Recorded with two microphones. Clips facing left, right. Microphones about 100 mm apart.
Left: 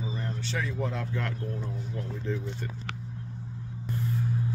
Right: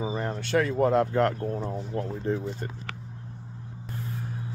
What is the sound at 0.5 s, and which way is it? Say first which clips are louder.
Speech: right 11 dB; 60° right (ahead or behind).